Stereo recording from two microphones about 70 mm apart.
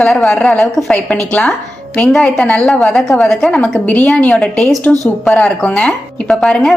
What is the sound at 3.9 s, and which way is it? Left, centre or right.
Speech, left.